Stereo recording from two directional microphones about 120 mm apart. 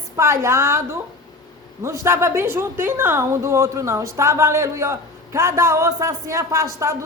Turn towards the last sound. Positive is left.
turn(degrees=-25)  # may be behind; listen again after turning